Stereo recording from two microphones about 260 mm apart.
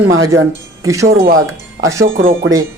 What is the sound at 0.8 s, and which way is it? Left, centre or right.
Speech, centre.